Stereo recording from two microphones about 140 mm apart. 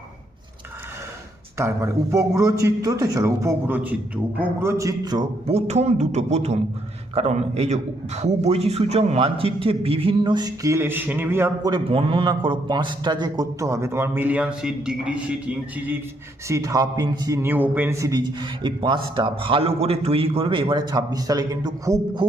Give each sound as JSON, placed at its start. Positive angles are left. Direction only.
{"t": 1.5, "sound": "a man's voice", "side_deg": -20}
{"t": 5.5, "sound": "a man's voice", "side_deg": -50}
{"t": 11.7, "sound": "a man's voice", "side_deg": -40}
{"t": 16.5, "sound": "a man's voice", "side_deg": -25}